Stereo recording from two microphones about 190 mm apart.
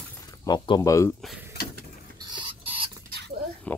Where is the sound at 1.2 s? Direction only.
5° right (ahead or behind).